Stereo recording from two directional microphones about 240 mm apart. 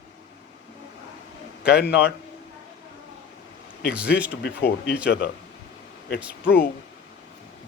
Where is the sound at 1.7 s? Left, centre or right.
Left.